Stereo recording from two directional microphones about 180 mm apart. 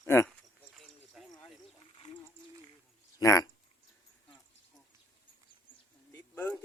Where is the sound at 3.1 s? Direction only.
20° left (ahead or behind).